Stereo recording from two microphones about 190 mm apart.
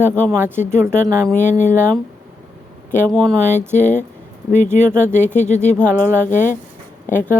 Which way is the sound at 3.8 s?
40° left (ahead or behind).